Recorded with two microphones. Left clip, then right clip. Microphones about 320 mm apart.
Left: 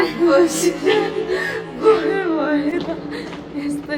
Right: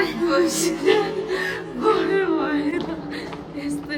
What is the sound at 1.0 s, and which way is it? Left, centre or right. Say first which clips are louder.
A woman's voice: left 3 dB; centre.